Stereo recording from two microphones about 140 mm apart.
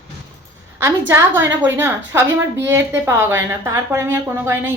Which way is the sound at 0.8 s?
15° right (ahead or behind).